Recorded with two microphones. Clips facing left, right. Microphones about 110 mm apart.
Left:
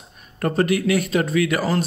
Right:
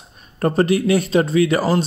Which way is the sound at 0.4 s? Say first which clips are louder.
Right 3 dB; 30° right (ahead or behind).